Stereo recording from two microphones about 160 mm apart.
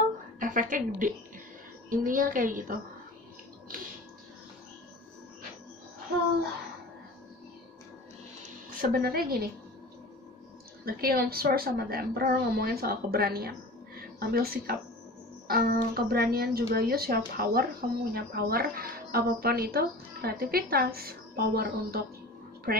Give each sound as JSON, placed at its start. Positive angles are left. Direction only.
{"t": 0.4, "sound": "a woman's voice", "side_deg": -55}
{"t": 8.6, "sound": "a woman's voice", "side_deg": -65}
{"t": 10.9, "sound": "a woman's voice", "side_deg": -70}